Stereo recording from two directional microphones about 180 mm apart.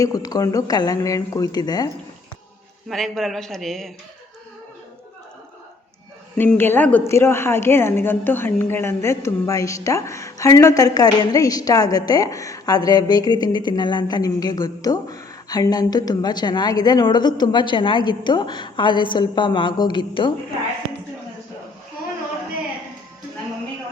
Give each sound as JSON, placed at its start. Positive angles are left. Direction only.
{"t": 0.0, "sound": "speech", "side_deg": 20}
{"t": 2.9, "sound": "a man's voice", "side_deg": 0}
{"t": 6.3, "sound": "a woman's voice", "side_deg": 10}